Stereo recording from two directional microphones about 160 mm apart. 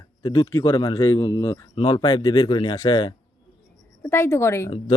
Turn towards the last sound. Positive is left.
turn(degrees=15)  # may be behind; listen again after turning